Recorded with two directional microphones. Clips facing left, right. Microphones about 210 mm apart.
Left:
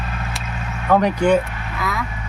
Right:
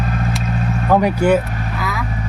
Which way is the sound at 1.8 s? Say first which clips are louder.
Left 1 dB; centre (ahead or behind).